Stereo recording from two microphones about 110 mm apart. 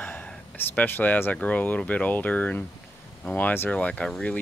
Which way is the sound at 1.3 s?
15° left (ahead or behind).